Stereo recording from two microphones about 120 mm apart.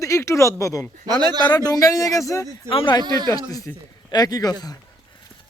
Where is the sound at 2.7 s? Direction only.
45° left (ahead or behind).